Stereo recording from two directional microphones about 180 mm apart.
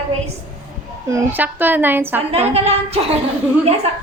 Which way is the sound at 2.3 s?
35° right (ahead or behind).